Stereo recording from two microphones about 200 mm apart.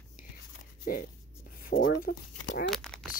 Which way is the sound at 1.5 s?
45° left (ahead or behind).